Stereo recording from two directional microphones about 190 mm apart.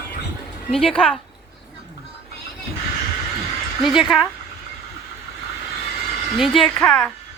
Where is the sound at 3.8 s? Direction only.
Centre (ahead or behind).